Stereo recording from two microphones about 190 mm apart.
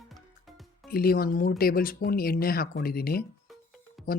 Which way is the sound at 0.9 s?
50° left (ahead or behind).